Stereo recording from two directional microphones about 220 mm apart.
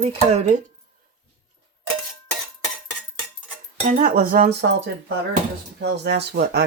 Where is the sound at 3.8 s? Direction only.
35° right (ahead or behind).